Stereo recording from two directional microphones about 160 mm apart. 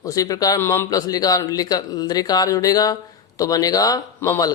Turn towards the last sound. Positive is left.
turn(degrees=20)  # may be behind; listen again after turning